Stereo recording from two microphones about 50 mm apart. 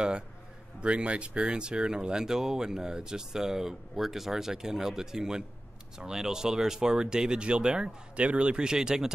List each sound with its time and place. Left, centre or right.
0.7 s a man's voice: right